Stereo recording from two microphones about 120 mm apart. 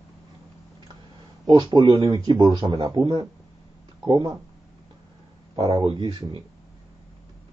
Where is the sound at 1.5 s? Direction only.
40° right (ahead or behind).